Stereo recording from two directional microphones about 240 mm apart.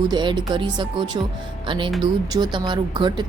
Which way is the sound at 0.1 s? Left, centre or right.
Centre.